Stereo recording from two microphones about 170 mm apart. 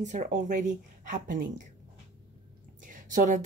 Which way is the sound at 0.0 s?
45° right (ahead or behind).